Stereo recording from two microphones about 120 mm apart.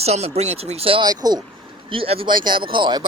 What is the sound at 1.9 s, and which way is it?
Speech, 50° right (ahead or behind).